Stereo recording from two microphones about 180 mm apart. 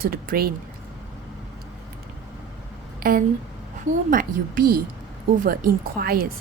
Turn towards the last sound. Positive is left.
turn(degrees=-55)  # may be behind; listen again after turning